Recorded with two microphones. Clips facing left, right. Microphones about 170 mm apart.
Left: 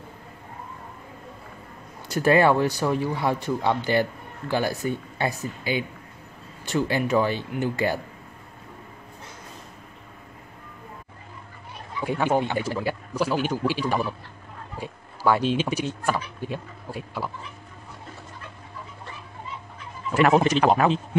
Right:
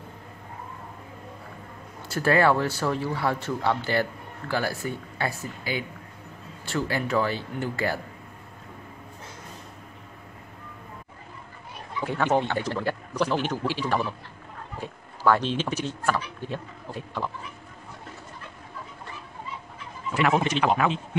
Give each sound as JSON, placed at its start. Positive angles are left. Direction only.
{"t": 2.0, "sound": "speech", "side_deg": 20}
{"t": 12.0, "sound": "speech", "side_deg": 10}
{"t": 20.2, "sound": "a man's voice", "side_deg": 40}